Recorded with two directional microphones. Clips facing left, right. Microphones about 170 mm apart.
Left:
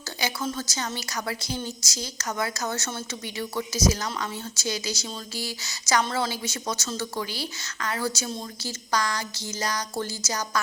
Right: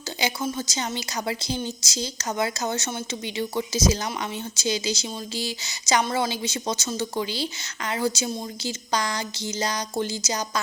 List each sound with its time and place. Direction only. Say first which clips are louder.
0.4 s a woman's voice: right 2 dB; 15° right (ahead or behind)